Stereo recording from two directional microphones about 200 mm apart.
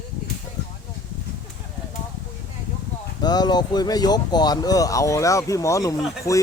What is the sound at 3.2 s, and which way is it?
Speech, 20° left (ahead or behind).